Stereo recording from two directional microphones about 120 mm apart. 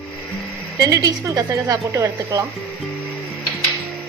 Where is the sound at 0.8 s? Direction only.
30° right (ahead or behind).